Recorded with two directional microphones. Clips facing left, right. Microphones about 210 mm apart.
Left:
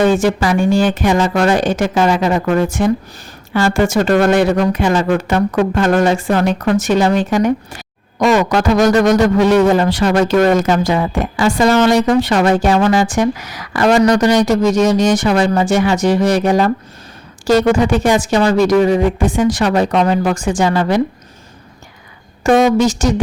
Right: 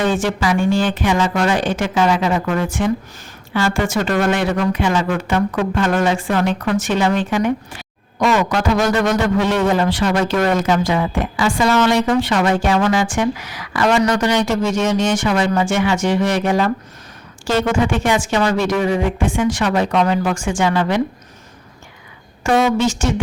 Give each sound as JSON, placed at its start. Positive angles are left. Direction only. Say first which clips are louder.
{"t": 0.0, "sound": "speech", "louder": "left 5 dB", "side_deg": 40}
{"t": 22.4, "sound": "speech", "louder": "left 4 dB", "side_deg": 40}